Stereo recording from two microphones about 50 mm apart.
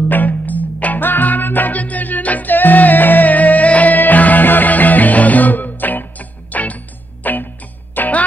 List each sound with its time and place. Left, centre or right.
0.1 s music: left